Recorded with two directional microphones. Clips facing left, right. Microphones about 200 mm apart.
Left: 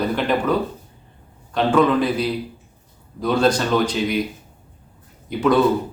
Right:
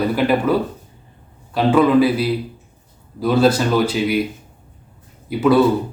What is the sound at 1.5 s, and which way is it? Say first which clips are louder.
A man's voice: right 3 dB; 5° right (ahead or behind).